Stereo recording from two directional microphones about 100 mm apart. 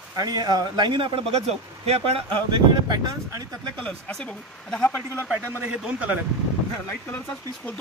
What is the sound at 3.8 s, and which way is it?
Speech, 10° left (ahead or behind).